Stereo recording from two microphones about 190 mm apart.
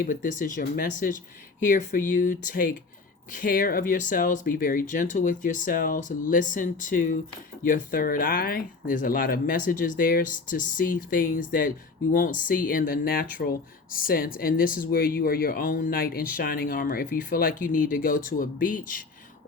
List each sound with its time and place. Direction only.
0.0 s speech: 45° left (ahead or behind)